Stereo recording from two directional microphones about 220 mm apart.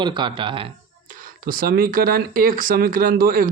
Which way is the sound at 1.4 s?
40° right (ahead or behind).